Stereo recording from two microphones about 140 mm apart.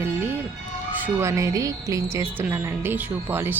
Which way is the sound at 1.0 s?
20° right (ahead or behind).